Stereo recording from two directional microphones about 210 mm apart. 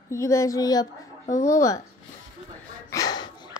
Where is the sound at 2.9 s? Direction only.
15° left (ahead or behind).